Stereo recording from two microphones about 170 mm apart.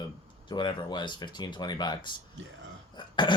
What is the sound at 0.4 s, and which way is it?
Speech, 25° left (ahead or behind).